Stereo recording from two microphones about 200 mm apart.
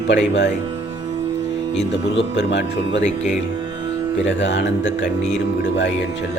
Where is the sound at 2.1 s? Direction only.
60° left (ahead or behind).